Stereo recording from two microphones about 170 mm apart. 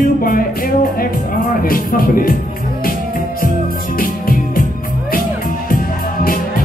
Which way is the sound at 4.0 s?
55° left (ahead or behind).